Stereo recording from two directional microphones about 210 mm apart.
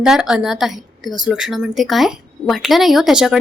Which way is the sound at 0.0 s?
Centre (ahead or behind).